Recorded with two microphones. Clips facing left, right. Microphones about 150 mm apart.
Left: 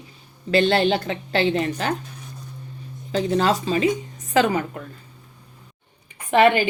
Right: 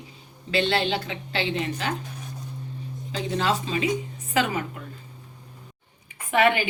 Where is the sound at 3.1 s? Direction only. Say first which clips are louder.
Left 6 dB; 40° left (ahead or behind).